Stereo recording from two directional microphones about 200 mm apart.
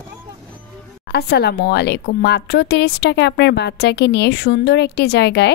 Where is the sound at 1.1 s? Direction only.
55° left (ahead or behind).